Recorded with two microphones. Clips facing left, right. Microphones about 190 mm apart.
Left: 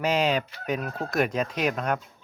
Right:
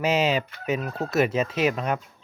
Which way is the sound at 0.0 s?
5° right (ahead or behind).